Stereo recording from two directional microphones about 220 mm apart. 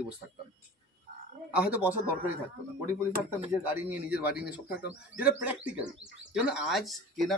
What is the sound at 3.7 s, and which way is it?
A man's voice, 10° right (ahead or behind).